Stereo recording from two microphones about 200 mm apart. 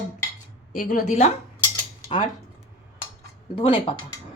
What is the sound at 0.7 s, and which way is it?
Speech, 45° left (ahead or behind).